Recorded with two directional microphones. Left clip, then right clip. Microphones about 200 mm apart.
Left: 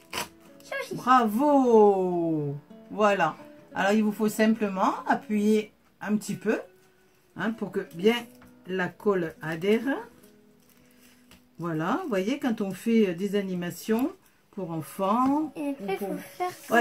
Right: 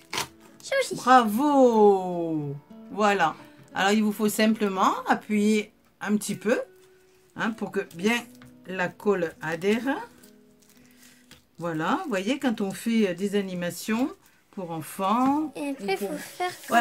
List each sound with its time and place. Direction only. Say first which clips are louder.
0.7 s speech: right 3 dB; 50° right (ahead or behind)
3.0 s speech: right 1 dB; 40° right (ahead or behind)
11.6 s speech: right 2 dB; 40° right (ahead or behind)
15.5 s speech: right 2 dB; 50° right (ahead or behind)